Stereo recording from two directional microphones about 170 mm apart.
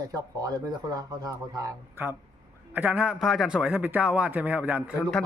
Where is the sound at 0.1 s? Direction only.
20° right (ahead or behind).